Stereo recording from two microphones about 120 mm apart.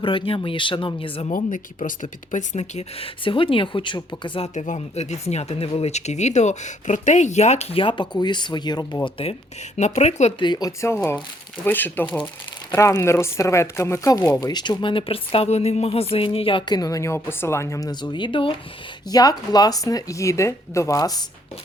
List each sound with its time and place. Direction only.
0.0 s speech: 45° left (ahead or behind)
1.5 s speech: 90° left; by 3.1 s 70° left (ahead or behind)
3.2 s speech: 45° left (ahead or behind)
4.5 s speech: 85° left; by 9.0 s 35° left (ahead or behind)
9.0 s speech: 50° left (ahead or behind)
9.7 s speech: 70° left (ahead or behind)
10.4 s speech: 40° left (ahead or behind)
10.7 s speech: 25° left (ahead or behind); by 18.5 s 45° left (ahead or behind)
19.1 s speech: 30° left (ahead or behind)